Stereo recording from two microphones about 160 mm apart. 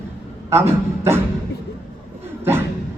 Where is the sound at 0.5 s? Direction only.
15° right (ahead or behind).